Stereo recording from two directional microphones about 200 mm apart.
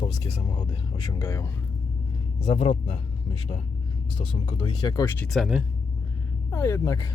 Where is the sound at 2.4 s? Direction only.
30° left (ahead or behind).